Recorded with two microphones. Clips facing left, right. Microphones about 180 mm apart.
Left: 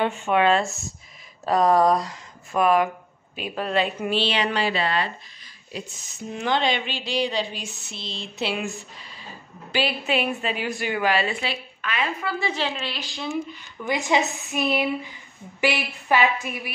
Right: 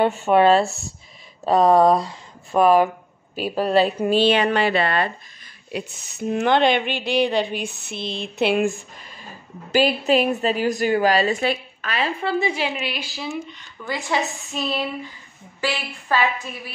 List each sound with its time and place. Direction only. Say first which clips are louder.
0.0 s a woman's voice: right 5 dB; 40° right (ahead or behind)
1.4 s speech: right 4 dB; centre (ahead or behind)
2.5 s a woman's voice: right 4 dB; 30° right (ahead or behind)
12.4 s a woman's voice: right 3 dB; 10° right (ahead or behind)
13.8 s a woman's voice: left 2 dB; 20° left (ahead or behind)